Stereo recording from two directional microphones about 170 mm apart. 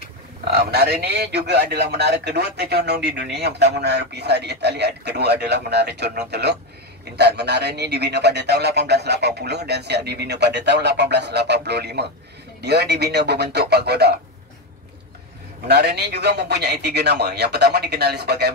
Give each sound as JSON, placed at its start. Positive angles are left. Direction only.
{"t": 0.5, "sound": "a man's voice", "side_deg": -65}
{"t": 15.7, "sound": "a man's voice", "side_deg": -75}